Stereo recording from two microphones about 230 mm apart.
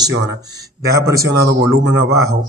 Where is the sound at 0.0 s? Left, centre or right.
Right.